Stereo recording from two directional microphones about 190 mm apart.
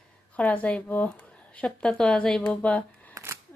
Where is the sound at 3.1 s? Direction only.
15° right (ahead or behind).